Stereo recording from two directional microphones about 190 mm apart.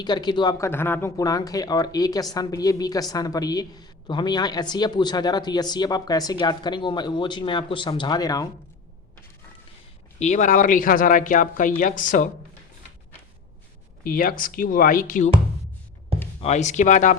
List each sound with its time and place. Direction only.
0.0 s a woman's voice: 20° left (ahead or behind)
0.7 s a woman's voice: 10° left (ahead or behind)
10.2 s speech: 40° left (ahead or behind)
14.0 s speech: 50° left (ahead or behind)
16.4 s speech: 35° left (ahead or behind)